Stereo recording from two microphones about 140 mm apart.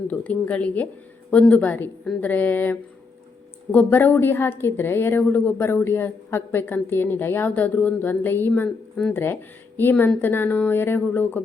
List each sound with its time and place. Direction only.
0.1 s a woman's voice: 10° left (ahead or behind)